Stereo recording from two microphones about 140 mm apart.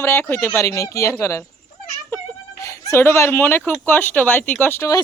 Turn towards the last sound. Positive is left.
turn(degrees=20)  # may be behind; listen again after turning